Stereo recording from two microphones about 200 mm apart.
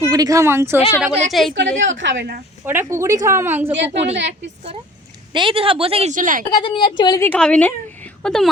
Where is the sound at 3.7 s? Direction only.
60° right (ahead or behind).